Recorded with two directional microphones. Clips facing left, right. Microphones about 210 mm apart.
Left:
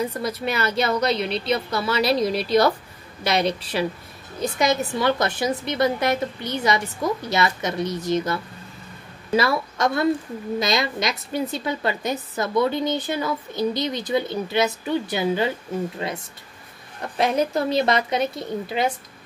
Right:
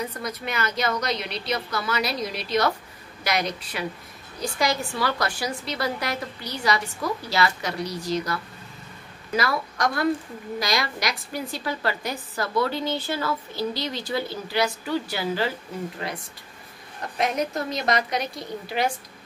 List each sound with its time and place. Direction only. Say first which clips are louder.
0.1 s a woman's voice: left 5 dB; 30° left (ahead or behind)
17.2 s a woman's voice: left 5 dB; 30° left (ahead or behind)